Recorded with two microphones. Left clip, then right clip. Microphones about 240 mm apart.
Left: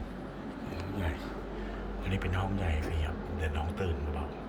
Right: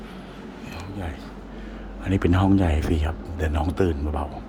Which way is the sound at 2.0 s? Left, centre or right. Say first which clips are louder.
Right 15 dB; right.